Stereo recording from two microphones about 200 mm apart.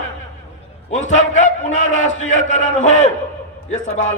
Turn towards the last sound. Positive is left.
turn(degrees=35)  # may be behind; listen again after turning